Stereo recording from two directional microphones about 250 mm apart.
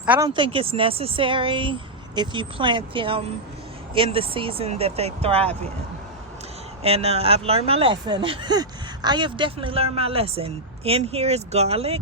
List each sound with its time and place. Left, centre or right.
0.0 s speech: centre
0.3 s speech: centre
6.8 s speech: right